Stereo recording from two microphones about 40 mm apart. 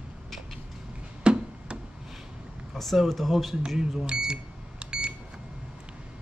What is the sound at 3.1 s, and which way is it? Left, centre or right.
Speech, centre.